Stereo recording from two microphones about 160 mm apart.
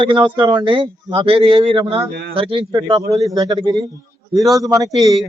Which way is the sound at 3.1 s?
Centre (ahead or behind).